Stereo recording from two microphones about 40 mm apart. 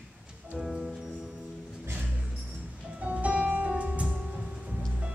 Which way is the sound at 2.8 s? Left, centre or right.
Right.